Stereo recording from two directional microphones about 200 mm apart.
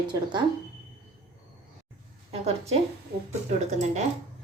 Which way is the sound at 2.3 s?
30° right (ahead or behind).